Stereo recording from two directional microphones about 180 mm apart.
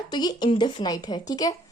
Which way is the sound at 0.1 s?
20° left (ahead or behind).